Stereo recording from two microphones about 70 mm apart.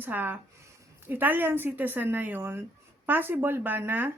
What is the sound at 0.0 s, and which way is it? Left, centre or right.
Speech, right.